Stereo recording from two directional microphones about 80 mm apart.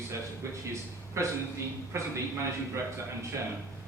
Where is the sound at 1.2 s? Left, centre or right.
Right.